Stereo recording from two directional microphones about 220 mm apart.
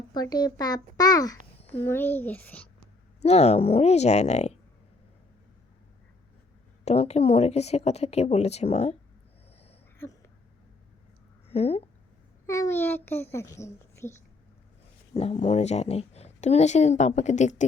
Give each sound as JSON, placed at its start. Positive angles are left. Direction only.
{"t": 0.1, "sound": "a child's voice", "side_deg": 20}
{"t": 3.2, "sound": "speech", "side_deg": 30}
{"t": 6.8, "sound": "speech", "side_deg": 30}
{"t": 10.0, "sound": "a sound", "side_deg": 10}
{"t": 11.4, "sound": "speech", "side_deg": 30}
{"t": 12.5, "sound": "a child's voice", "side_deg": 15}
{"t": 15.1, "sound": "speech", "side_deg": 30}